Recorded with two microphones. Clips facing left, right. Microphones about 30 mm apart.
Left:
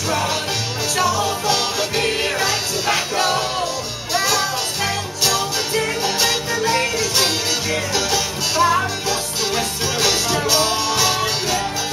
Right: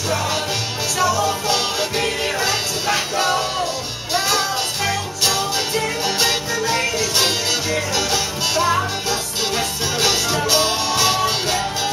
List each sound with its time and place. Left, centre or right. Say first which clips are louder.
0.9 s music: right 1 dB; centre
1.5 s music: even; centre
5.8 s music: left 2 dB; centre